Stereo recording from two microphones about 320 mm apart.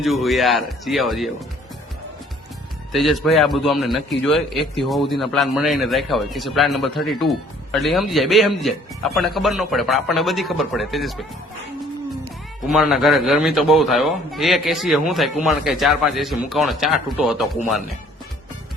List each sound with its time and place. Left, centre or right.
0.0 s a man's voice: centre
2.9 s a man's voice: centre
12.6 s a man's voice: centre